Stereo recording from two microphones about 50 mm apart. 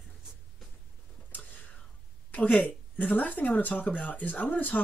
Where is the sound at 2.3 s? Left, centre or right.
Left.